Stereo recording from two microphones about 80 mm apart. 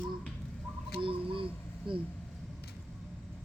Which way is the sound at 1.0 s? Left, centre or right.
Right.